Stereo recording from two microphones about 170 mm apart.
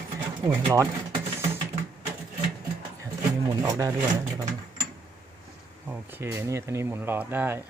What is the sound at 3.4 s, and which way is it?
Speech, 20° right (ahead or behind).